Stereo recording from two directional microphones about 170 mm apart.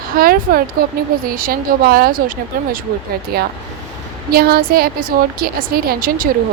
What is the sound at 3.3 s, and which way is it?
A woman's voice, 65° right (ahead or behind).